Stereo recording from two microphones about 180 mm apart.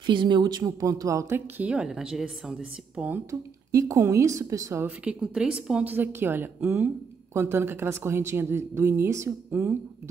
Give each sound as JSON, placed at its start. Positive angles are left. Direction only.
{"t": 0.0, "sound": "speech", "side_deg": -25}
{"t": 3.0, "sound": "speech", "side_deg": -15}